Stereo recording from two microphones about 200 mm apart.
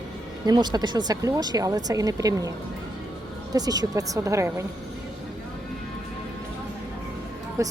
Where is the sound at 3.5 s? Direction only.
20° right (ahead or behind).